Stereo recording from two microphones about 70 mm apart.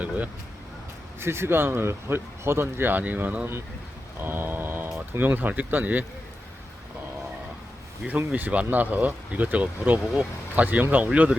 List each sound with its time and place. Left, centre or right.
1.2 s speech: right
8.3 s speech: right